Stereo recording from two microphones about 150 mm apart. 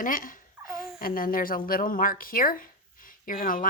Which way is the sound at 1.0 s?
70° left (ahead or behind).